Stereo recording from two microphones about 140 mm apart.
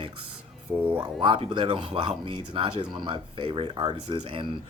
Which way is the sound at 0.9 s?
35° right (ahead or behind).